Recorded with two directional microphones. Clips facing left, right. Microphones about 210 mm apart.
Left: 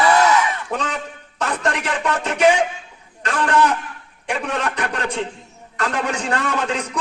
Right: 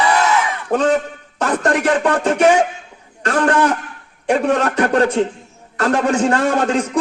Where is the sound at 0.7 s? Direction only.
45° right (ahead or behind).